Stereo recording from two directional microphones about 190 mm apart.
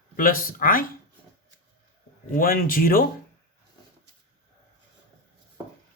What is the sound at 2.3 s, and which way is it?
Speech, 50° left (ahead or behind).